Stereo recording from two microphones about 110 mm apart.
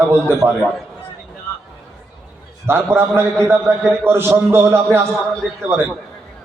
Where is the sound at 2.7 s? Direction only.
20° right (ahead or behind).